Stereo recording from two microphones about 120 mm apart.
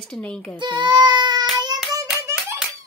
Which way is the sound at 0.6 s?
40° right (ahead or behind).